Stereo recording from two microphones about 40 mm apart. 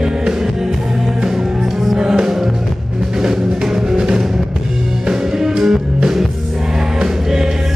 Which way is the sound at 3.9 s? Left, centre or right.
Right.